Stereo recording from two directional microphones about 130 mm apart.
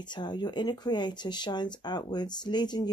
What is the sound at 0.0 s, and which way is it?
Speech, 35° left (ahead or behind).